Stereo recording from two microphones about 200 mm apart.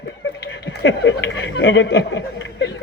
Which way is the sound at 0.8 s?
65° left (ahead or behind).